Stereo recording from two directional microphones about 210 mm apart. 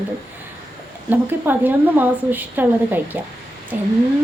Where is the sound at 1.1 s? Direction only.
10° right (ahead or behind).